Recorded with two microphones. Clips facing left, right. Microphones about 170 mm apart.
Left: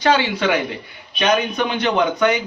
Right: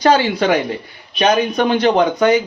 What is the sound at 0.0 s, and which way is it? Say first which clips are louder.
Speech: right 4 dB; 40° right (ahead or behind).